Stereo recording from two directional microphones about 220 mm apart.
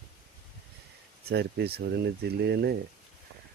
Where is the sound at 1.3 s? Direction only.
50° right (ahead or behind).